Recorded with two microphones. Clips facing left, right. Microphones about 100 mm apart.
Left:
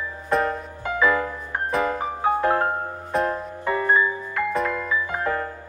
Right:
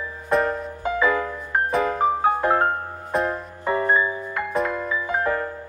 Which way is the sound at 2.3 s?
20° right (ahead or behind).